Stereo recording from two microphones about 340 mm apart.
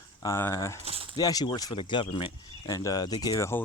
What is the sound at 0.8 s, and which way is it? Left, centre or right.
Speech, centre.